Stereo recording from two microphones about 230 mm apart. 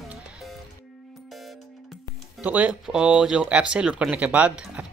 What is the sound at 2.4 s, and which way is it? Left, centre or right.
Speech, centre.